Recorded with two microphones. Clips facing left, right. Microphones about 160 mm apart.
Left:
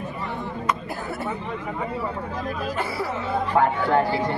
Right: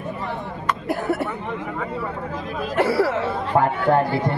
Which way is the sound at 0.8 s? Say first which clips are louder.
Right 7 dB; 75° right (ahead or behind).